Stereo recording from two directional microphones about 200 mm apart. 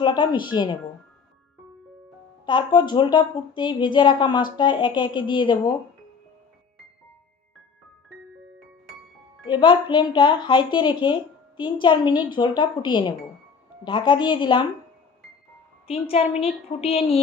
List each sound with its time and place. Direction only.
0.0 s a woman's voice: 20° left (ahead or behind)
2.5 s a woman's voice: 25° left (ahead or behind)
9.5 s a woman's voice: 25° left (ahead or behind)
15.9 s a woman's voice: 30° left (ahead or behind)